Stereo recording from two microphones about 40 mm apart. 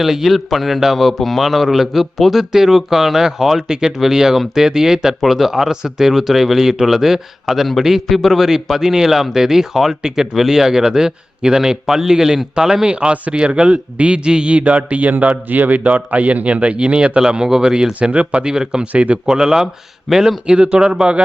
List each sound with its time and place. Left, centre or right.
0.0 s a man's voice: centre; by 14.6 s right
14.6 s a man's voice: right; by 18.1 s centre
18.1 s a man's voice: right
18.4 s speech: centre
18.9 s a man's voice: right
19.2 s speech: centre